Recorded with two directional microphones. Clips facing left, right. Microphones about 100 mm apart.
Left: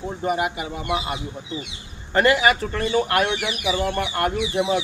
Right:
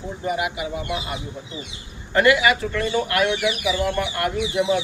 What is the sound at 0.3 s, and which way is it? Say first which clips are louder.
Speech: even; 40° left (ahead or behind).